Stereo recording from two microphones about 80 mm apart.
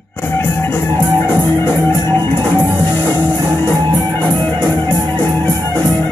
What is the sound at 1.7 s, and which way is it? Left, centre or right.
Music, right.